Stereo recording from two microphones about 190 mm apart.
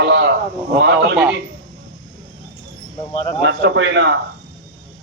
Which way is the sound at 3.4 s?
65° right (ahead or behind).